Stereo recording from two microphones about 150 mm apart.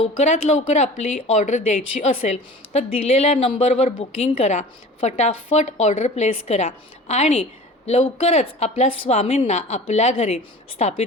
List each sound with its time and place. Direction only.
0.2 s a woman's voice: 45° left (ahead or behind)